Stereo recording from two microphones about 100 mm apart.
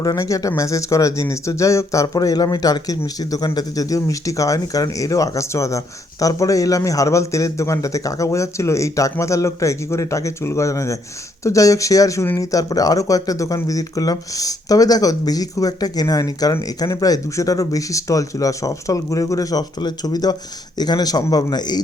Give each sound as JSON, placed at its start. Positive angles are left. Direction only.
{"t": 0.0, "sound": "a man's voice", "side_deg": 35}